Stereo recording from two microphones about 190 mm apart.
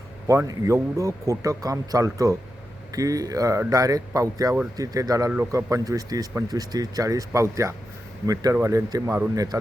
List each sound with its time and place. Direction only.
0.3 s speech: 15° right (ahead or behind)